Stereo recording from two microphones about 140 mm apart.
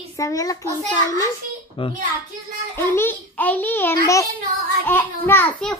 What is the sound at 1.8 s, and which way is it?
Speech, 40° left (ahead or behind).